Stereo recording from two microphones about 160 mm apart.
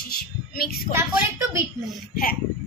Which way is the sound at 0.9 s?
20° right (ahead or behind).